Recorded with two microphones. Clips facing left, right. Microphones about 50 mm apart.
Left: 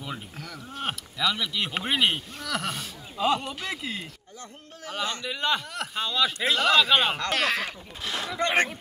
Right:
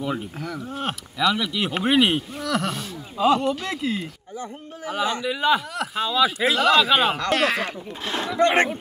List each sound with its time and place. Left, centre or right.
0.0 s speech: centre
4.4 s speech: centre
8.0 s speech: right